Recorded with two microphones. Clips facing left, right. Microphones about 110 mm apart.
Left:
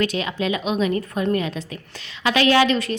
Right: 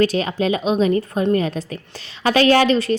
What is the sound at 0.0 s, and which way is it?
A woman's voice, 35° right (ahead or behind).